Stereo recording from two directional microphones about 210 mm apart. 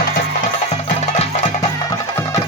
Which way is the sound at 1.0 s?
30° left (ahead or behind).